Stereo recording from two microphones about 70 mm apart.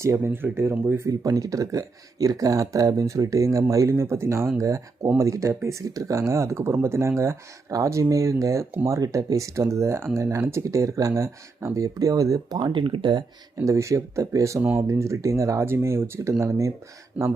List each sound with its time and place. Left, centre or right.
0.2 s speech: right
1.0 s speech: right
4.5 s speech: right
13.6 s speech: right
17.2 s speech: right